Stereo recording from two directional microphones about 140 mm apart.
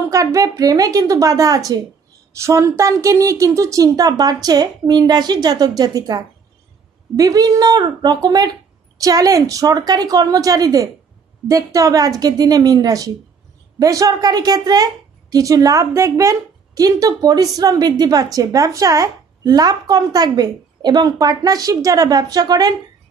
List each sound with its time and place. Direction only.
0.1 s a woman's voice: 25° right (ahead or behind)